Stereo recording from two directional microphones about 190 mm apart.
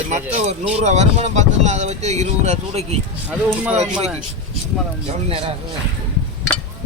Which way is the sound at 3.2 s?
5° right (ahead or behind).